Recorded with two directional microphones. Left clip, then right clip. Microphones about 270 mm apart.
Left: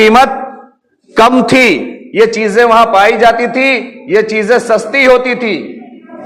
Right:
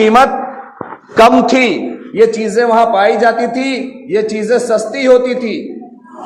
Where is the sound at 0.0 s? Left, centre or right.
Left.